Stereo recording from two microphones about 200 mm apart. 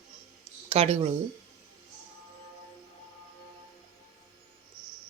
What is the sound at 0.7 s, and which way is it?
Speech, 30° right (ahead or behind).